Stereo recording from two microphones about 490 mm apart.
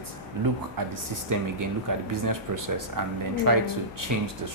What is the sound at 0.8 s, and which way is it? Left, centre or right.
A man's voice, right.